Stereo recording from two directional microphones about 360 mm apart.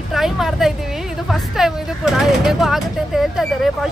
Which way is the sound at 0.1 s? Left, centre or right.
Centre.